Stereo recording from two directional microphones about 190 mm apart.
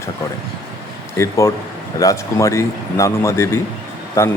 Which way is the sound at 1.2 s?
15° left (ahead or behind).